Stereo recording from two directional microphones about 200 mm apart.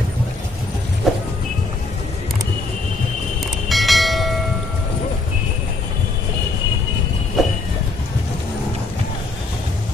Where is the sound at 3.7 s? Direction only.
Centre (ahead or behind).